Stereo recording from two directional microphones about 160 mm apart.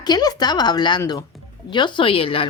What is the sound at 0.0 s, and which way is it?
Speech, 25° left (ahead or behind).